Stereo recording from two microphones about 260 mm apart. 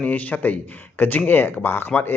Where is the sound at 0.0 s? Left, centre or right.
Centre.